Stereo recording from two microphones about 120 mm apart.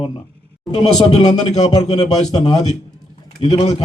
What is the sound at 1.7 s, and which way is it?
Speech, 65° left (ahead or behind).